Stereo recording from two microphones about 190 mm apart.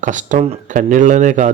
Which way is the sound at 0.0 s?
40° right (ahead or behind).